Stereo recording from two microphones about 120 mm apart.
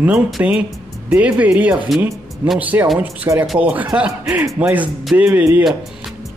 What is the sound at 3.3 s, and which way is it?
Speech, 25° right (ahead or behind).